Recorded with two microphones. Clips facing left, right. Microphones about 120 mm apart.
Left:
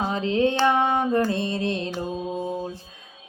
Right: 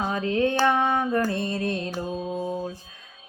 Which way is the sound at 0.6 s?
20° left (ahead or behind).